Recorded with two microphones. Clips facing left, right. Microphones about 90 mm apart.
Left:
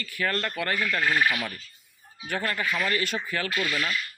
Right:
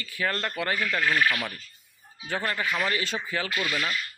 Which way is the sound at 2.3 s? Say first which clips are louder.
Even; 20° right (ahead or behind).